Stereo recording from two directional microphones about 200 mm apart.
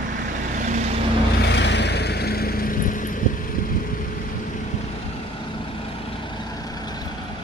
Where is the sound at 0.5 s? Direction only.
40° right (ahead or behind).